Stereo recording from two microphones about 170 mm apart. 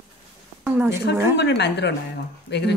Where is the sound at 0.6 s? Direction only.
10° right (ahead or behind).